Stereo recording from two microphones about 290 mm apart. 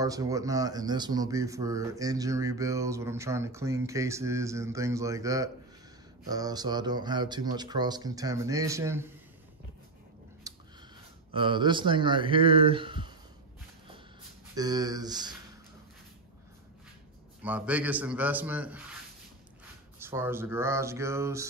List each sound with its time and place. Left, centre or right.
0.0 s speech: centre
10.4 s a sound: centre
11.3 s speech: centre
14.5 s speech: centre
17.4 s a man's voice: centre
20.0 s speech: centre